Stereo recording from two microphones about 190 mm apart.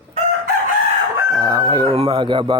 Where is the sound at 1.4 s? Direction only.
20° right (ahead or behind).